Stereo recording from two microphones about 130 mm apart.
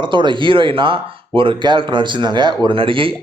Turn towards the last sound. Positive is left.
turn(degrees=-40)  # may be behind; listen again after turning